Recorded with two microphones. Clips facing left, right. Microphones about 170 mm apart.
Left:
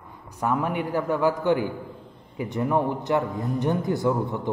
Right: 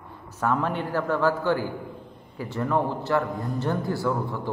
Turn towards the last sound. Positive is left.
turn(degrees=20)  # may be behind; listen again after turning